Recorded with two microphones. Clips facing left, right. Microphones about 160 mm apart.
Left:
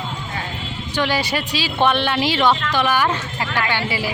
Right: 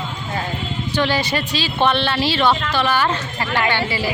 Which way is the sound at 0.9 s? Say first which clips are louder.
Right 1 dB; 10° left (ahead or behind).